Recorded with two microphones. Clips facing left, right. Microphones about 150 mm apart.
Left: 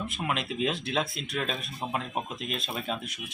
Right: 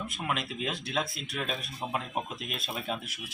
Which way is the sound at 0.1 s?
Centre (ahead or behind).